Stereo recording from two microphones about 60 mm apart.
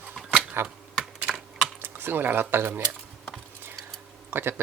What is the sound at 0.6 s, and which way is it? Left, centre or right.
Speech, right.